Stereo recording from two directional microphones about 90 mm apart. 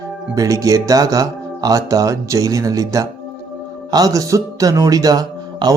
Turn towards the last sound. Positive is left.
turn(degrees=-45)  # may be behind; listen again after turning